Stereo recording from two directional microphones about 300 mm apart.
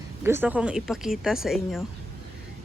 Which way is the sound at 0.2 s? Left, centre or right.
Centre.